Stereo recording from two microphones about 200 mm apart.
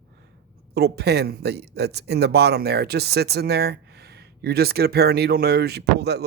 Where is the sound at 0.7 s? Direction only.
55° right (ahead or behind).